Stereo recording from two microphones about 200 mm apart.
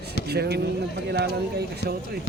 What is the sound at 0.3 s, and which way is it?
Speech, 55° right (ahead or behind).